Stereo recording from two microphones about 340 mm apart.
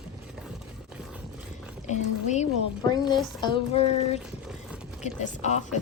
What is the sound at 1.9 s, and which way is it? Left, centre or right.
A woman's voice, centre.